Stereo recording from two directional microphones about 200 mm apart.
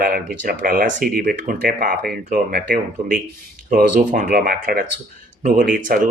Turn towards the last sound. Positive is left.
turn(degrees=-45)  # may be behind; listen again after turning